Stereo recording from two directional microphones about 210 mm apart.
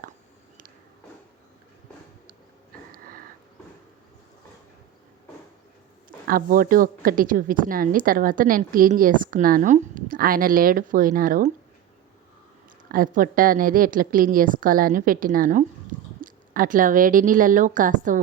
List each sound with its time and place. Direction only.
2.9 s a sound: 40° right (ahead or behind)
6.2 s a woman's voice: 45° right (ahead or behind)
12.9 s a woman's voice: 40° right (ahead or behind)